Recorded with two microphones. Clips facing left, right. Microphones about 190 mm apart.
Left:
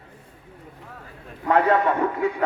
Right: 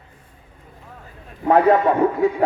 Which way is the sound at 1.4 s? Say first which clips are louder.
Right 4 dB; 35° right (ahead or behind).